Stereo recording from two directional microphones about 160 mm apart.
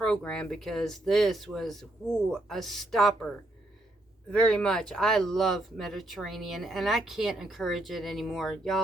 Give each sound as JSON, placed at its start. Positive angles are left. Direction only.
{"t": 0.0, "sound": "speech", "side_deg": 5}
{"t": 4.3, "sound": "speech", "side_deg": 5}